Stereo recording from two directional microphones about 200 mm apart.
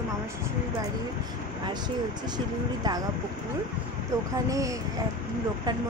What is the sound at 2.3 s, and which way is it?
Speech, 20° right (ahead or behind).